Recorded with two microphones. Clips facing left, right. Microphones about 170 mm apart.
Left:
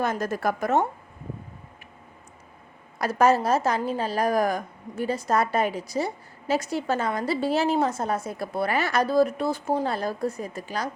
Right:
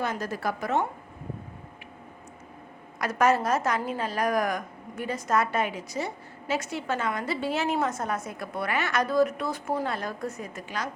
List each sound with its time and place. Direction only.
0.0 s a woman's voice: 45° left (ahead or behind)
3.0 s a woman's voice: 30° left (ahead or behind)